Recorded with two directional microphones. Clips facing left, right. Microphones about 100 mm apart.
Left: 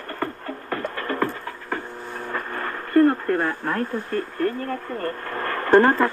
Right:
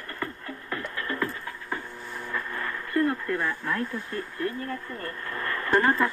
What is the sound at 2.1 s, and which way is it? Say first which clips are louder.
Speech: left 3 dB; 50° left (ahead or behind).